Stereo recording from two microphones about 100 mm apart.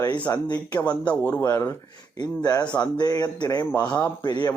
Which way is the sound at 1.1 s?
15° left (ahead or behind).